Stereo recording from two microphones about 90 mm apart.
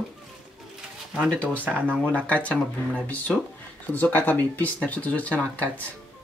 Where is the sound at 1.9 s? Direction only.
10° left (ahead or behind).